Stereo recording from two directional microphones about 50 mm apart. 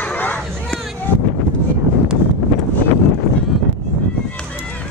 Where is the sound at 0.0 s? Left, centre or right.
Left.